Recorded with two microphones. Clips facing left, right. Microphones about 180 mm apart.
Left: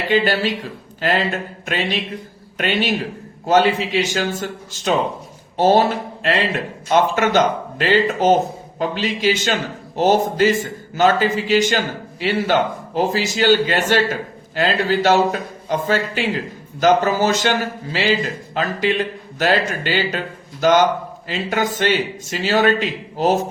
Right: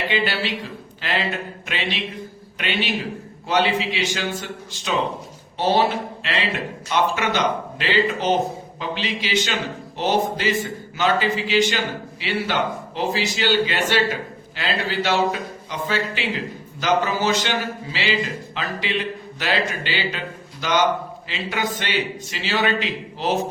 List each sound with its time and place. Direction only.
0.1 s speech: 45° left (ahead or behind)